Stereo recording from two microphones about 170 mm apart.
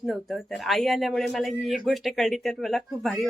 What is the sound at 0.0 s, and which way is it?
Speech, centre (ahead or behind).